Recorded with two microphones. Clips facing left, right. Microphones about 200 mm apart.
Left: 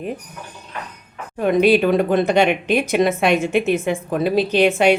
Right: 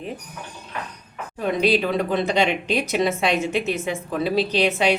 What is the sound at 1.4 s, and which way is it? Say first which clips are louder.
A woman's voice: left 6 dB; 55° left (ahead or behind).